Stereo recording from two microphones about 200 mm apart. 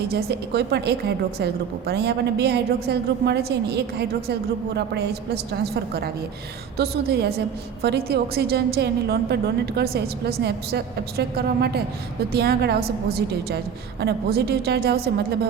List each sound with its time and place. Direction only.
0.1 s a woman's voice: 50° right (ahead or behind)
6.7 s a woman's voice: 55° right (ahead or behind)